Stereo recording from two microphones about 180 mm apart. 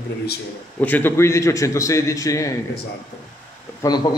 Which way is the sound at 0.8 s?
10° left (ahead or behind).